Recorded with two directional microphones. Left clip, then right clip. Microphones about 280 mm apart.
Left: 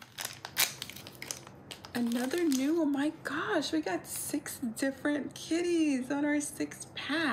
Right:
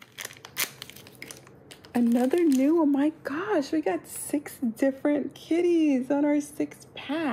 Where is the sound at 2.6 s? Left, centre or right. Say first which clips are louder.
Right 7 dB; centre.